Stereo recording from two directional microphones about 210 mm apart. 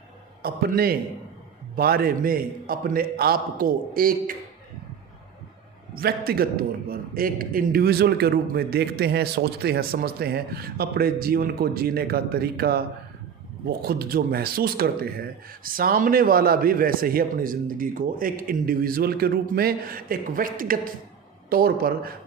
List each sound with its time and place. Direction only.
0.4 s speech: 45° right (ahead or behind)
5.9 s speech: 45° right (ahead or behind)
13.8 s speech: 45° right (ahead or behind)